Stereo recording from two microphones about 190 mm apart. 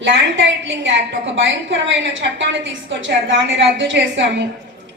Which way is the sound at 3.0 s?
75° right (ahead or behind).